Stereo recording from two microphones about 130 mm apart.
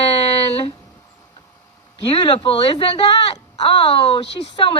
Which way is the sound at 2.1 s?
40° left (ahead or behind).